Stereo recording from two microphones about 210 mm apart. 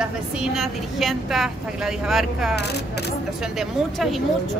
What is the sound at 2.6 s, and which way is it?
Speech, 50° left (ahead or behind).